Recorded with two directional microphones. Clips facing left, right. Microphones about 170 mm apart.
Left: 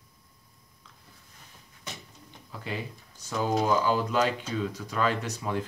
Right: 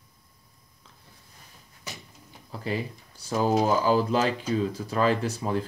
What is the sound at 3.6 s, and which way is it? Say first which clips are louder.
Speech: right 1 dB; 35° right (ahead or behind).